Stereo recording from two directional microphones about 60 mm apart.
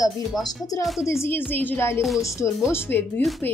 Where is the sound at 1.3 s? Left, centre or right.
Left.